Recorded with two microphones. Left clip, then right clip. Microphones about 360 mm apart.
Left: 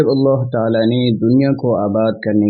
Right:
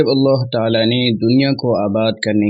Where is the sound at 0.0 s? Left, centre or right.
Left.